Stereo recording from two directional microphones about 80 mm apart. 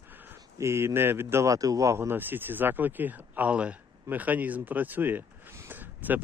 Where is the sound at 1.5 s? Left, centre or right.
Right.